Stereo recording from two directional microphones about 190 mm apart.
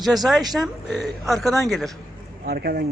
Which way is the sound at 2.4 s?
55° right (ahead or behind).